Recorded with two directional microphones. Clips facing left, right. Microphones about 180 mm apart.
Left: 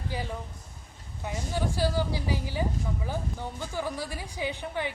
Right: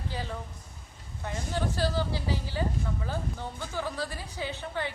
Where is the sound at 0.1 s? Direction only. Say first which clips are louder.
Left 2 dB; 15° left (ahead or behind).